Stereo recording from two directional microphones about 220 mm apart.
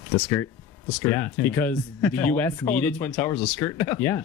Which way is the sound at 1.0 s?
10° left (ahead or behind).